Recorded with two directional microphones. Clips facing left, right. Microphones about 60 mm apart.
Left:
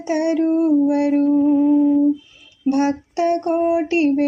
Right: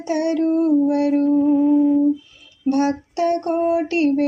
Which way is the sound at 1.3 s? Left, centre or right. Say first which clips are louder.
Left 1 dB; centre.